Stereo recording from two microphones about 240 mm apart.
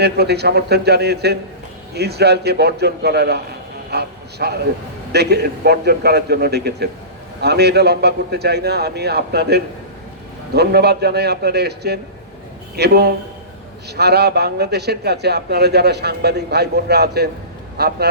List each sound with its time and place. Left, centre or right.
0.0 s a man's voice: right